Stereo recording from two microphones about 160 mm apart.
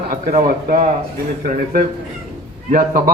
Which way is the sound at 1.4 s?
65° right (ahead or behind).